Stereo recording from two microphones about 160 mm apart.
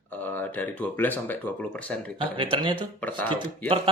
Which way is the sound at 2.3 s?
35° right (ahead or behind).